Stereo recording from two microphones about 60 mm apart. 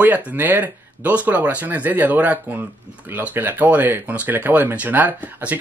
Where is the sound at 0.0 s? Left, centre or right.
Right.